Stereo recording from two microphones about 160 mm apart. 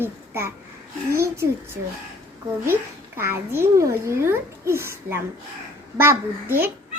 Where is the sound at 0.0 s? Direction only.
15° right (ahead or behind).